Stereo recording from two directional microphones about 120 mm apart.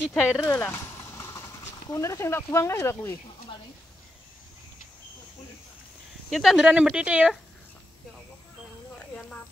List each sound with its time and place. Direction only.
0.2 s speech: 15° left (ahead or behind)
6.3 s speech: centre (ahead or behind)
8.9 s a sound: 10° left (ahead or behind)